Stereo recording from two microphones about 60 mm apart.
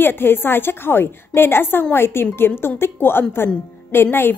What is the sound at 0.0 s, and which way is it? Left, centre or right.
A woman's voice, left.